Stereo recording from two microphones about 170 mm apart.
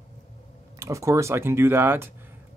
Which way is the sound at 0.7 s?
15° right (ahead or behind).